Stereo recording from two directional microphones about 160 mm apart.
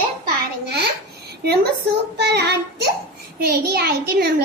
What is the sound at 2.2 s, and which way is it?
Child singing, 90° right.